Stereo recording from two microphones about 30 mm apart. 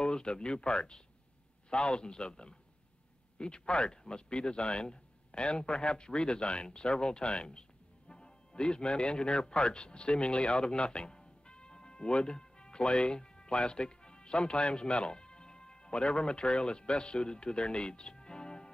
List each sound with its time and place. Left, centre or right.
0.0 s a man's voice: left